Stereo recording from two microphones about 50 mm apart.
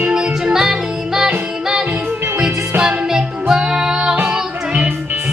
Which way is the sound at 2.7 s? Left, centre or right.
Right.